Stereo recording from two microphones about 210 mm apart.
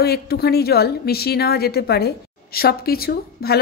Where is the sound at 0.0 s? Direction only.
50° left (ahead or behind).